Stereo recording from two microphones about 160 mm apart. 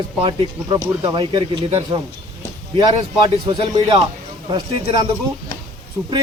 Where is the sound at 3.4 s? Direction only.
30° right (ahead or behind).